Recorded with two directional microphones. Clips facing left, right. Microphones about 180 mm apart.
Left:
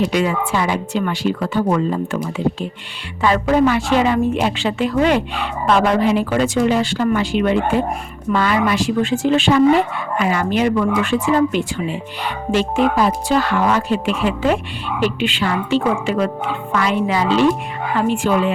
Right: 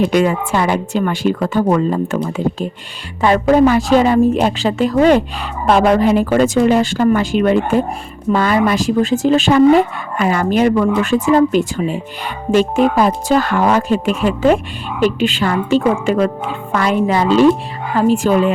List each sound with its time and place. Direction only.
0.1 s speech: 45° right (ahead or behind)
3.2 s speech: 40° right (ahead or behind)